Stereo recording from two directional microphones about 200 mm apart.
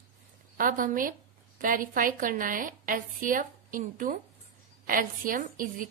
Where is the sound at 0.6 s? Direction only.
45° right (ahead or behind).